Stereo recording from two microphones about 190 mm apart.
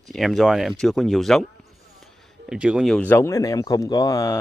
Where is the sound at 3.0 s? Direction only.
10° left (ahead or behind).